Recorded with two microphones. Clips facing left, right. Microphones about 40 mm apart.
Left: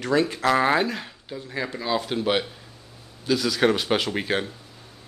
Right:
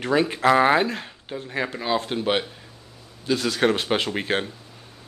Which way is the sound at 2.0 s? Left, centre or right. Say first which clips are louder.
Even; centre.